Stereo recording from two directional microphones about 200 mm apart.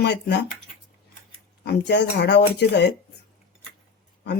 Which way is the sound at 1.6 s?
60° left (ahead or behind).